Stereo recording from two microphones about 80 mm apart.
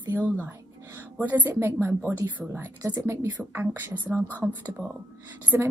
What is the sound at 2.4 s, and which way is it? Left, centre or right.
Speech, centre.